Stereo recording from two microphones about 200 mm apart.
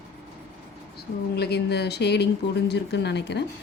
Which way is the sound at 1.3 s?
55° left (ahead or behind).